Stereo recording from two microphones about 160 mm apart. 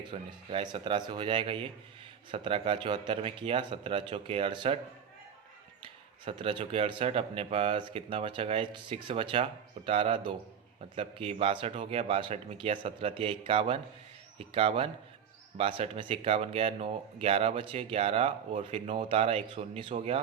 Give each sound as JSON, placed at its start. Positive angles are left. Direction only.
{"t": 0.1, "sound": "speech", "side_deg": -30}
{"t": 5.8, "sound": "speech", "side_deg": -30}